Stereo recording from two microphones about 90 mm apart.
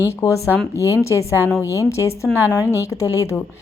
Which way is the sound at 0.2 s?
35° left (ahead or behind).